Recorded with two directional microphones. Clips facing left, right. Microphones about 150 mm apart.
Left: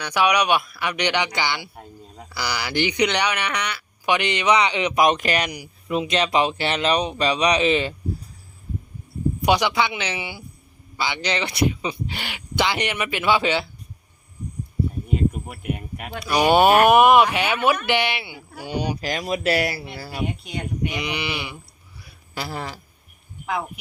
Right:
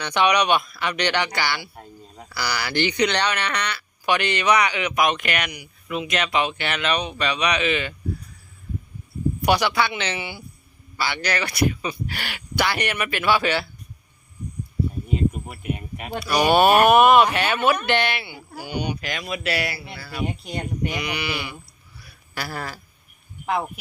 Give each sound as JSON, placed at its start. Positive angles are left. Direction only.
{"t": 0.0, "sound": "a man's voice", "side_deg": 5}
{"t": 1.7, "sound": "speech", "side_deg": 0}
{"t": 2.3, "sound": "speech", "side_deg": 15}
{"t": 9.4, "sound": "a man's voice", "side_deg": 15}
{"t": 16.2, "sound": "a man's voice", "side_deg": 15}
{"t": 18.6, "sound": "speech", "side_deg": 30}
{"t": 20.9, "sound": "speech", "side_deg": 20}
{"t": 22.0, "sound": "a sound", "side_deg": 20}